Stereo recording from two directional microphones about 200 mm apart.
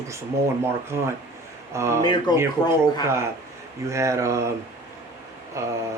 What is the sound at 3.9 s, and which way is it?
Speech, 15° right (ahead or behind).